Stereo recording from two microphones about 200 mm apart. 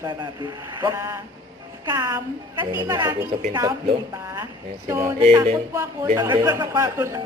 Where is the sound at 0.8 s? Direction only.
15° right (ahead or behind).